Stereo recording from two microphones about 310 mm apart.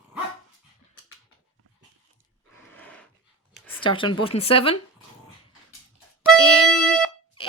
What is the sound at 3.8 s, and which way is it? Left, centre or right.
Speech, centre.